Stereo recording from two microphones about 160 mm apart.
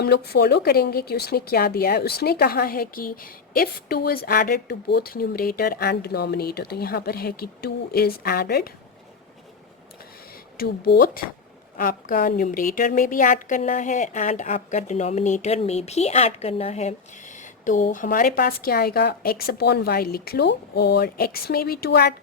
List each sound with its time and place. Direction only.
0.0 s speech: 80° left
10.6 s speech: 75° left (ahead or behind)
11.8 s a woman's voice: 60° left (ahead or behind); by 22.1 s 90° left